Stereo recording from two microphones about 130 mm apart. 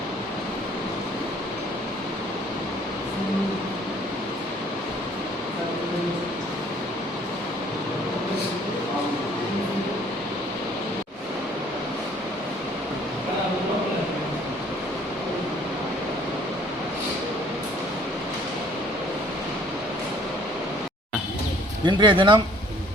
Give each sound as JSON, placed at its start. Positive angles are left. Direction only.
{"t": 21.8, "sound": "speech", "side_deg": -40}